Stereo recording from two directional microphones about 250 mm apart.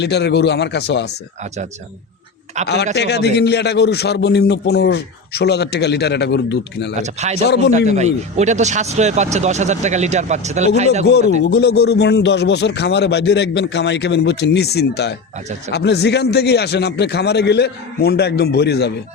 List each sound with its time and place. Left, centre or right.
0.0 s speech: left
2.6 s speech: right
2.9 s a man's voice: left
7.0 s speech: right
7.4 s a man's voice: left
7.7 s speech: right
11.0 s a man's voice: left